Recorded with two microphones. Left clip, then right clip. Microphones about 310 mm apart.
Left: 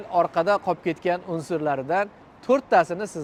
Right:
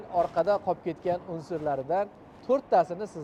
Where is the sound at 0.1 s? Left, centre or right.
Left.